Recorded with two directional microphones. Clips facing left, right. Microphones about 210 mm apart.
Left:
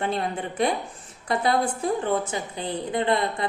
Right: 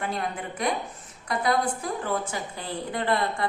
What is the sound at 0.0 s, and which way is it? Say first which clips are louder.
A woman's voice: left 4 dB; 25° left (ahead or behind).